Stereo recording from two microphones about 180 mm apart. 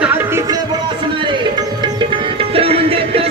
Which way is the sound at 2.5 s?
35° right (ahead or behind).